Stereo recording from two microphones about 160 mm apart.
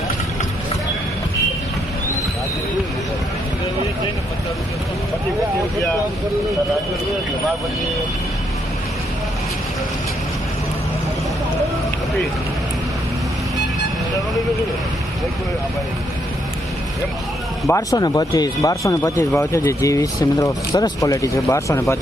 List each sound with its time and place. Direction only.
17.7 s speech: 20° left (ahead or behind)